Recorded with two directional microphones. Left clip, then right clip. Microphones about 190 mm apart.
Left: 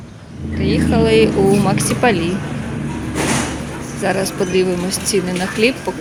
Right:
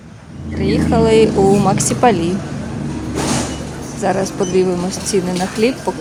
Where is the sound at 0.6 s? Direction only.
15° right (ahead or behind).